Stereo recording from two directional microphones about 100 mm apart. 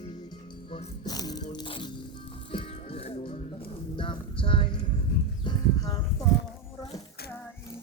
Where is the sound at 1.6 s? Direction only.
60° left (ahead or behind).